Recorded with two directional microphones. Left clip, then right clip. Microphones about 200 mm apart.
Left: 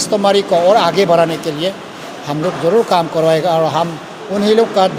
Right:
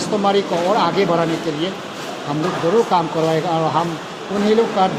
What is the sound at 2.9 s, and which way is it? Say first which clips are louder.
Speech: left 5 dB; 55° left (ahead or behind).